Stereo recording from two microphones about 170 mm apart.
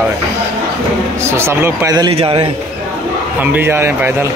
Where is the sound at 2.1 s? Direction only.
30° right (ahead or behind).